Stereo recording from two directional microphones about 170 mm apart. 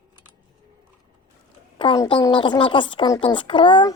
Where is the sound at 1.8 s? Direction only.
30° left (ahead or behind).